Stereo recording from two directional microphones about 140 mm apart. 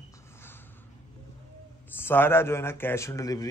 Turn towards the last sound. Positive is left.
turn(degrees=25)  # may be behind; listen again after turning